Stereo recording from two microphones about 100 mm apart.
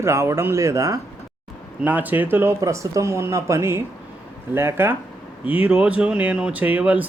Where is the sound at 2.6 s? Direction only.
30° right (ahead or behind).